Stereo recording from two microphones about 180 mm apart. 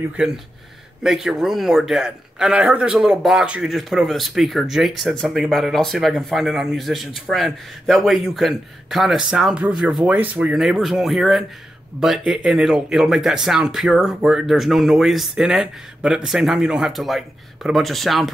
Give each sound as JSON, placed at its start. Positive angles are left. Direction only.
{"t": 0.2, "sound": "speech", "side_deg": -5}